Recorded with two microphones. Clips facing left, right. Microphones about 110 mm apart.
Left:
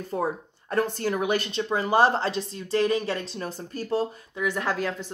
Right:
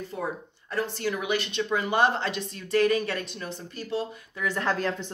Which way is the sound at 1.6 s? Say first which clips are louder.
Left 3 dB; 30° left (ahead or behind).